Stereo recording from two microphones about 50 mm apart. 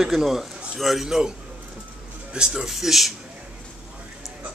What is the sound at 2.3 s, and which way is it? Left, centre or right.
Speech, centre.